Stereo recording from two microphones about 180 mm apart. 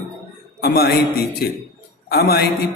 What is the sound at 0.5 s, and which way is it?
Speech, 60° left (ahead or behind).